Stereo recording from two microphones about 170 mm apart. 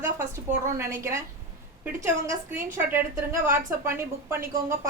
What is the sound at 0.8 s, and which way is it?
Speech, 15° right (ahead or behind).